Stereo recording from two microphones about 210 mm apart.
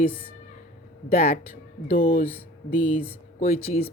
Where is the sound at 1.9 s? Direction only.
40° left (ahead or behind).